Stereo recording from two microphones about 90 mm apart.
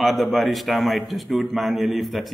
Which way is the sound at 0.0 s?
Centre (ahead or behind).